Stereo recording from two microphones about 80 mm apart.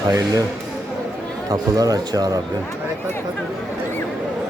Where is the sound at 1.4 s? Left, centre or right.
Right.